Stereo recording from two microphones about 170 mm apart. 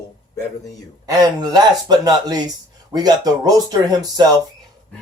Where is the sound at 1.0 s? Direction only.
25° right (ahead or behind).